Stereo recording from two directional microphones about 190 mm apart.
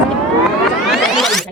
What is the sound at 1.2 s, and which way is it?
Music, centre (ahead or behind).